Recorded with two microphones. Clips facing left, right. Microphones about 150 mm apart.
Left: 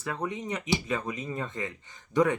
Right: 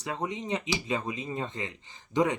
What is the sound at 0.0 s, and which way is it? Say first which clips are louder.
Speech: even; 20° right (ahead or behind).